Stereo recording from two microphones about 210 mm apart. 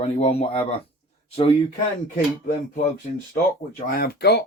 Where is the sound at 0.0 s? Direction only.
30° left (ahead or behind).